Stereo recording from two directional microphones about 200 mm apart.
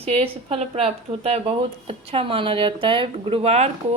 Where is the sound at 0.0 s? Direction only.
30° right (ahead or behind).